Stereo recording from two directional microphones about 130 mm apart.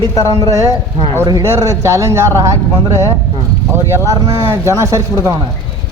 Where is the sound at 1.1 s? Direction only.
25° right (ahead or behind).